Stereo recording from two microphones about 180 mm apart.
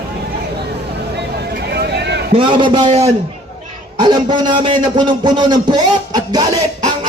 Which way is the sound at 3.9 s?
25° right (ahead or behind).